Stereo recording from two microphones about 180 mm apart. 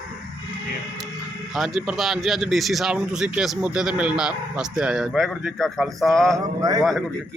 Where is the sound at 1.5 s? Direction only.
Centre (ahead or behind).